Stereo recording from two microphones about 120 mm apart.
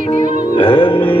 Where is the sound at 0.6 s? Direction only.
45° left (ahead or behind).